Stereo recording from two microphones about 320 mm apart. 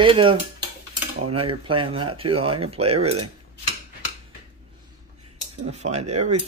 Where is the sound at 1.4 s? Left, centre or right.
Centre.